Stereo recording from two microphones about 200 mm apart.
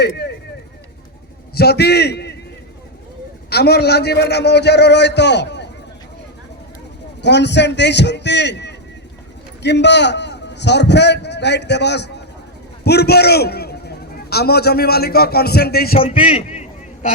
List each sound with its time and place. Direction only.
0.0 s speech: 55° left (ahead or behind)
1.5 s a man's voice: 55° left (ahead or behind)
3.5 s a man's voice: 55° left (ahead or behind)
7.2 s a man's voice: 60° left (ahead or behind)
16.0 s a sound: 30° left (ahead or behind)